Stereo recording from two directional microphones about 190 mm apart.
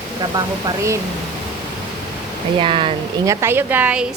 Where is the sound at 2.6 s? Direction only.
30° right (ahead or behind).